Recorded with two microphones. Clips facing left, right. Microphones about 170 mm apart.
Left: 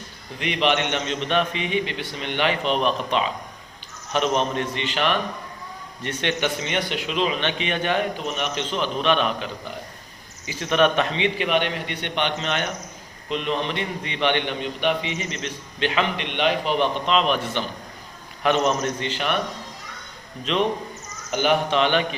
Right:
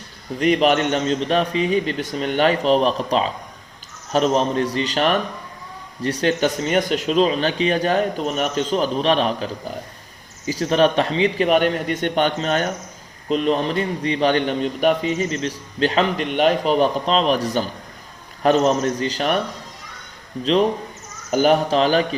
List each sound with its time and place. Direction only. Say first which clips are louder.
0.3 s a man's voice: right 6 dB; 40° right (ahead or behind)
20.4 s a man's voice: right 5 dB; 35° right (ahead or behind)